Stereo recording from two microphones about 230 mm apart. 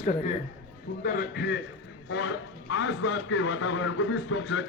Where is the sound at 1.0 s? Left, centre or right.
Left.